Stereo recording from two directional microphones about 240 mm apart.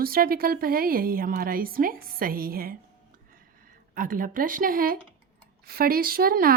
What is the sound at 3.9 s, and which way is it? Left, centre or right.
A woman's voice, right.